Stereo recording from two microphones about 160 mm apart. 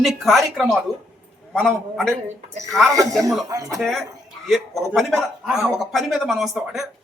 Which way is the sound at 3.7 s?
Centre (ahead or behind).